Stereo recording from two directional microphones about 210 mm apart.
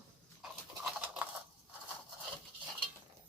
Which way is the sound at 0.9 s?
5° right (ahead or behind).